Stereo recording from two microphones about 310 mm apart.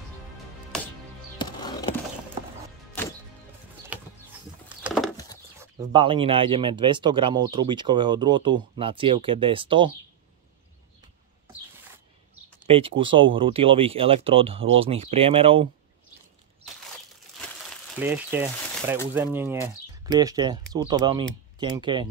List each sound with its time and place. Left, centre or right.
1.4 s music: centre
4.6 s a sound: centre
5.6 s speech: centre
12.6 s speech: centre
17.9 s speech: centre